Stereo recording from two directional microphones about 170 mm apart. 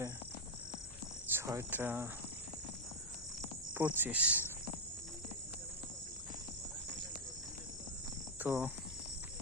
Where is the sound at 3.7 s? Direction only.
10° right (ahead or behind).